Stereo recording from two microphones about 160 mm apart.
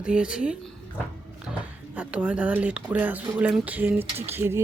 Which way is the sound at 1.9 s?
10° right (ahead or behind).